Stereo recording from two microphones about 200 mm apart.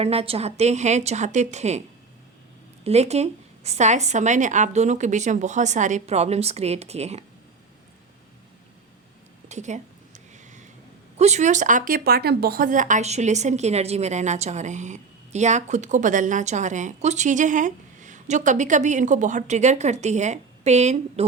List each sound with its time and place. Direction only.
0.0 s speech: 30° right (ahead or behind)
2.8 s speech: 35° right (ahead or behind)
9.5 s a sound: 35° right (ahead or behind)
11.2 s speech: 35° right (ahead or behind)